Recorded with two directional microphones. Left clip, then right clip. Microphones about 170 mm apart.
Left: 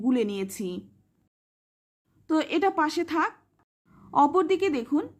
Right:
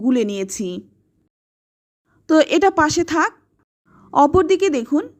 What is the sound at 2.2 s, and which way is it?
A woman's voice, 40° right (ahead or behind).